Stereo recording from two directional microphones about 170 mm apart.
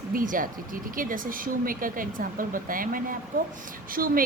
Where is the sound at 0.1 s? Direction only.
55° right (ahead or behind).